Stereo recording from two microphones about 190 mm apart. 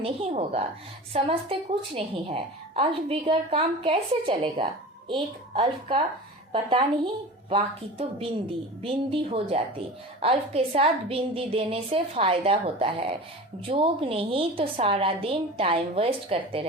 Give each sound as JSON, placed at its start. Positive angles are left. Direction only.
{"t": 0.0, "sound": "a woman's voice", "side_deg": -35}
{"t": 8.8, "sound": "a woman's voice", "side_deg": -30}